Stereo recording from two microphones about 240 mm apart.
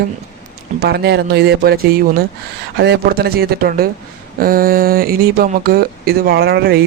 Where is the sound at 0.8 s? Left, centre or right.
Right.